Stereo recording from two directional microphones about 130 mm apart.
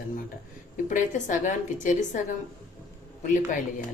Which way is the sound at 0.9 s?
80° left.